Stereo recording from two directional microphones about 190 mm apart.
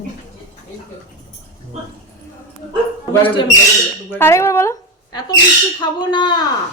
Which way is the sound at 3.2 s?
25° left (ahead or behind).